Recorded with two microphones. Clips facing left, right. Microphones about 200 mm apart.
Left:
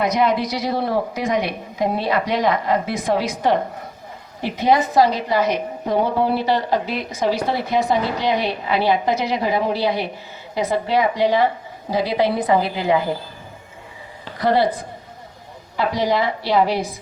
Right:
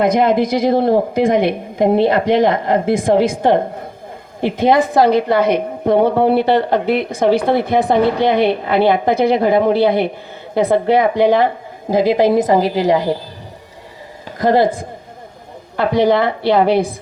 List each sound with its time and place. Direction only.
0.0 s a woman's voice: 50° right (ahead or behind)
14.3 s a woman's voice: 45° right (ahead or behind)